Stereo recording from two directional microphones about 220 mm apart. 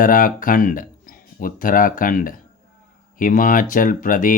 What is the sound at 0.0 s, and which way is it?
Speech, 40° left (ahead or behind).